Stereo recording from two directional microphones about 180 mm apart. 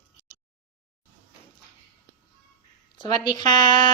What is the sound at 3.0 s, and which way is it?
Speech, 25° left (ahead or behind).